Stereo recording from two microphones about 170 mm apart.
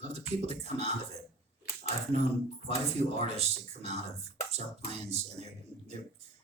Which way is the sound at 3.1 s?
40° right (ahead or behind).